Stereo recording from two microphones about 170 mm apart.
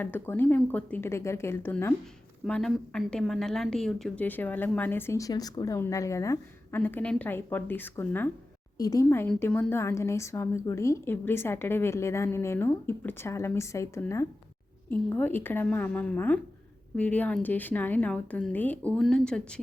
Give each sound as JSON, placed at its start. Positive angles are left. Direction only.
{"t": 0.0, "sound": "a woman's voice", "side_deg": 10}